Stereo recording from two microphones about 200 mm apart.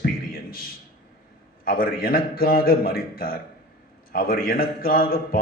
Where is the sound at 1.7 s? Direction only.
45° left (ahead or behind).